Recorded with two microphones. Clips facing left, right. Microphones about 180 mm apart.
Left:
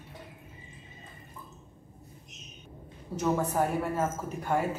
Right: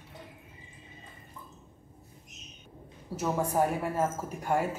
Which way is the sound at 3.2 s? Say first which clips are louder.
Even; 10° right (ahead or behind).